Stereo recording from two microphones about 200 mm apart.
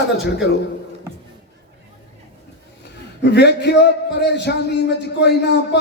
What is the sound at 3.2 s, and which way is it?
A man's voice, 55° left (ahead or behind).